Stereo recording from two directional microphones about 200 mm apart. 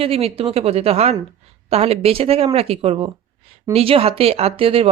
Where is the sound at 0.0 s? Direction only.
30° right (ahead or behind).